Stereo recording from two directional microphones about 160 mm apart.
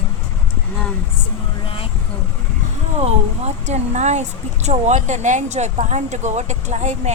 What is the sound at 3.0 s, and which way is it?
Speech, 40° right (ahead or behind).